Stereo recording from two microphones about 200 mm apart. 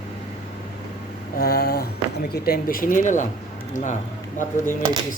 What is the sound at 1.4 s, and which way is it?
Speech, 50° left (ahead or behind).